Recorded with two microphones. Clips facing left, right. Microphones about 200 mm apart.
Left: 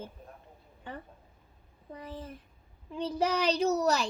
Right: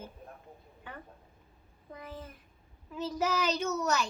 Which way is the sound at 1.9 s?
30° left (ahead or behind).